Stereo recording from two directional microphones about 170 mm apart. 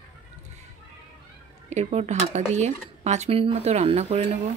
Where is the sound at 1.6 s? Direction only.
40° right (ahead or behind).